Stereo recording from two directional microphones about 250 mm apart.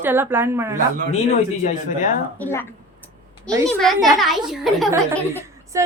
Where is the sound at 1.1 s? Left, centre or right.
Left.